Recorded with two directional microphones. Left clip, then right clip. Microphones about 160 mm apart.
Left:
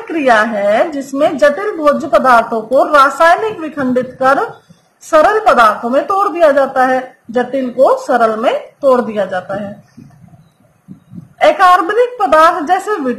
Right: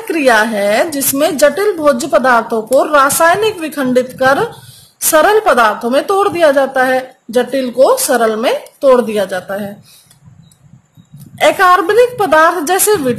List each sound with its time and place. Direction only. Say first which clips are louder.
0.1 s a woman's voice: even; 90° right
1.8 s a woman's voice: even; 65° right (ahead or behind); by 4.4 s 90° right
5.1 s a woman's voice: even; 75° right (ahead or behind)
11.4 s a woman's voice: left 1 dB; 90° right